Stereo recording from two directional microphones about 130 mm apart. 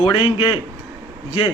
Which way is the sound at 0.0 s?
30° left (ahead or behind).